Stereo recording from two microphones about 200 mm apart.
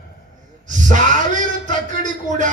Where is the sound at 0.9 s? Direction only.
40° right (ahead or behind).